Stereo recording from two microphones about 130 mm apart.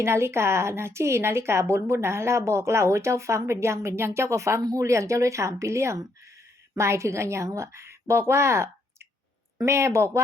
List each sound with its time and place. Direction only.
0.0 s a woman's voice: 20° right (ahead or behind)